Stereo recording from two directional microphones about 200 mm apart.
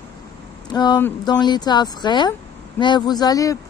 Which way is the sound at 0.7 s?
20° left (ahead or behind).